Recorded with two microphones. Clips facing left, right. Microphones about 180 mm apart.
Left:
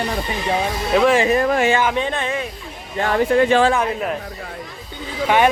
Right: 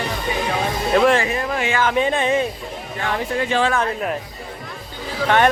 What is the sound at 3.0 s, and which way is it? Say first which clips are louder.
Speech: left 7 dB; 45° left (ahead or behind).